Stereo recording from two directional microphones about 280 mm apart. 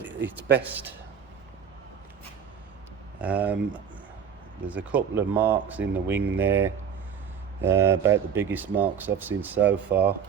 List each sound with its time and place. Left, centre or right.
0.6 s speech: centre
3.2 s a man's voice: centre